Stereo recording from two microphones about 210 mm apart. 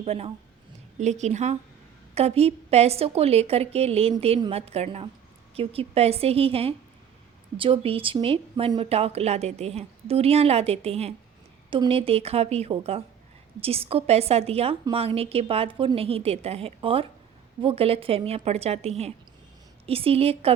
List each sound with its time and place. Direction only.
0.0 s speech: 30° right (ahead or behind)